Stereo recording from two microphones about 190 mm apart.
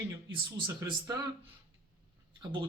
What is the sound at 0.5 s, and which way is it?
Speech, 20° right (ahead or behind).